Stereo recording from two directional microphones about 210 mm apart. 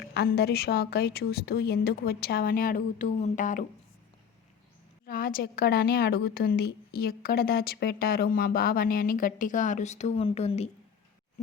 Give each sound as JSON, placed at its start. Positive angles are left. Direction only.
{"t": 0.0, "sound": "a woman's voice", "side_deg": 50}
{"t": 5.0, "sound": "a woman's voice", "side_deg": 45}